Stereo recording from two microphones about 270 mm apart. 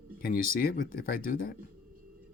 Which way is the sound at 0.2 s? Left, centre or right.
Left.